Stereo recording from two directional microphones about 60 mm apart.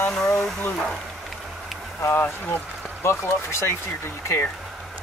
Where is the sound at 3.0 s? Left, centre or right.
Left.